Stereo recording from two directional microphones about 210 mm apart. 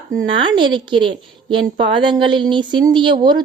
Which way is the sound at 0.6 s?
20° right (ahead or behind).